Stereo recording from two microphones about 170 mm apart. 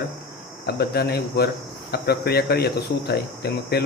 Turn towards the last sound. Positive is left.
turn(degrees=70)  # may be behind; listen again after turning